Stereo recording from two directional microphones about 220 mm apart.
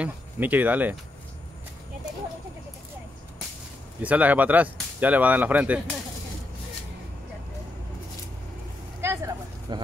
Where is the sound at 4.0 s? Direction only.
5° right (ahead or behind).